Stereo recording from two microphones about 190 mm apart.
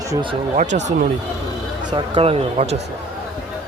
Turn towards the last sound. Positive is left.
turn(degrees=-35)  # may be behind; listen again after turning